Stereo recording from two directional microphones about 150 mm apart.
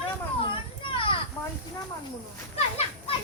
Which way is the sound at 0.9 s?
35° left (ahead or behind).